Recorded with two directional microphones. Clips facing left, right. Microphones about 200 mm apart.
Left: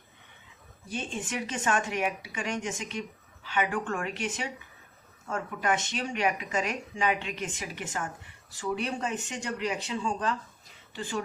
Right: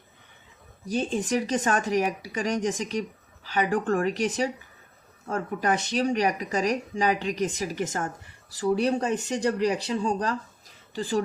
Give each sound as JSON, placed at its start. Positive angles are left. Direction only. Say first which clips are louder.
{"t": 0.9, "sound": "speech", "louder": "right 9 dB", "side_deg": -35}